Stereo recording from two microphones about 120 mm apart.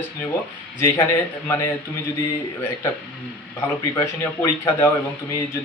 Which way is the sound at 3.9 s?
20° left (ahead or behind).